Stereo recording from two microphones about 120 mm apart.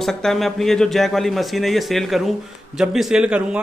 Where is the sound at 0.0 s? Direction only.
5° left (ahead or behind).